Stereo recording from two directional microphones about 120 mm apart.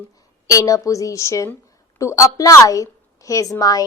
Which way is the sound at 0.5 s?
30° left (ahead or behind).